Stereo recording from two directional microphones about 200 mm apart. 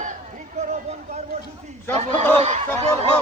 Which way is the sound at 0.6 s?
35° right (ahead or behind).